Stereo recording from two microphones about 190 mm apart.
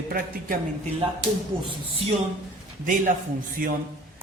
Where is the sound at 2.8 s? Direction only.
45° right (ahead or behind).